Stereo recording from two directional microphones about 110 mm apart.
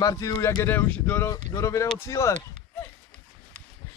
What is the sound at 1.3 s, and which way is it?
Speech, 30° left (ahead or behind).